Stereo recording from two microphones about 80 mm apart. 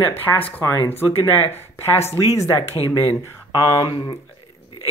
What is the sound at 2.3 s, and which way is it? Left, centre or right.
Speech, left.